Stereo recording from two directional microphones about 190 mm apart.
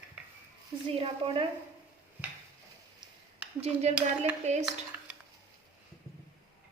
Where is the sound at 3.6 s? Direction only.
35° right (ahead or behind).